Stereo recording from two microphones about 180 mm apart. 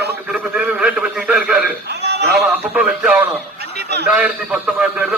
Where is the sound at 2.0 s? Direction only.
65° right (ahead or behind).